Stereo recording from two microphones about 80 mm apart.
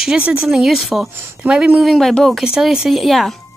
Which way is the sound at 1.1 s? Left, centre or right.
Right.